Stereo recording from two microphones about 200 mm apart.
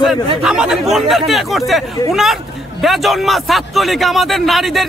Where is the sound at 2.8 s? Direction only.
Centre (ahead or behind).